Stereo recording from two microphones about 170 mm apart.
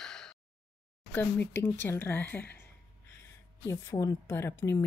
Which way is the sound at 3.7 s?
20° left (ahead or behind).